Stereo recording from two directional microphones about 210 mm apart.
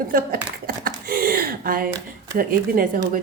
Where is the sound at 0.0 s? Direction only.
45° right (ahead or behind).